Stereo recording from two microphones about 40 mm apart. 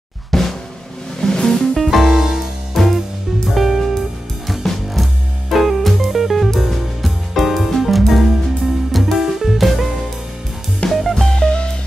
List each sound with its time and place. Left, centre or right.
0.3 s drum: centre
1.2 s music: centre
1.8 s music: centre
2.8 s music: centre
11.2 s music: centre